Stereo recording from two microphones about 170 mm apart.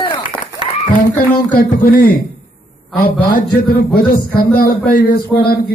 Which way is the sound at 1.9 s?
70° left (ahead or behind).